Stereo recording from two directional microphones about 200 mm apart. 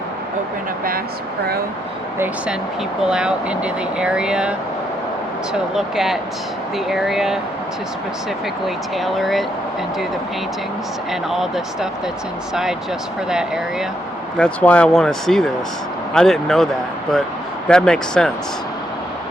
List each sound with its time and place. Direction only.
2.1 s speech: 10° right (ahead or behind)
5.7 s speech: centre (ahead or behind)
8.6 s speech: centre (ahead or behind)
11.1 s speech: centre (ahead or behind)
14.3 s speech: 5° left (ahead or behind)
17.7 s speech: 5° left (ahead or behind)